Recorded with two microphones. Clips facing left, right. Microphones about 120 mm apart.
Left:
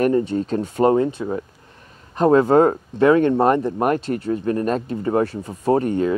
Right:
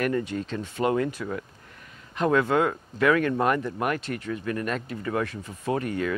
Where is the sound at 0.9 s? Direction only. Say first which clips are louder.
Left 7 dB; 25° left (ahead or behind).